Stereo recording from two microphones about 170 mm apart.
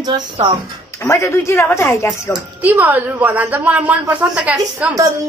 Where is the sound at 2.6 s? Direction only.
10° right (ahead or behind).